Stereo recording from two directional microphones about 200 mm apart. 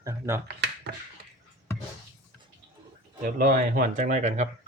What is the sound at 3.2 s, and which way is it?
Speech, 45° right (ahead or behind).